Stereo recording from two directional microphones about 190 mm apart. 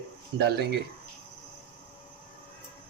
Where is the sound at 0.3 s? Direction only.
60° right (ahead or behind).